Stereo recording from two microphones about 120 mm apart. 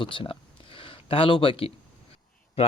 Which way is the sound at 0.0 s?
45° left (ahead or behind).